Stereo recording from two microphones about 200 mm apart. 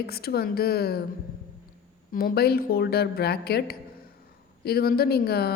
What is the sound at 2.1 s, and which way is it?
A woman's voice, 45° left (ahead or behind).